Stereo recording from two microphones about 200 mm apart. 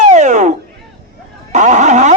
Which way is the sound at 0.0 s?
35° right (ahead or behind).